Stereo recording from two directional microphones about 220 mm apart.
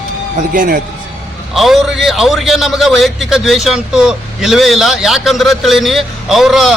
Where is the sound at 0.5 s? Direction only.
35° right (ahead or behind).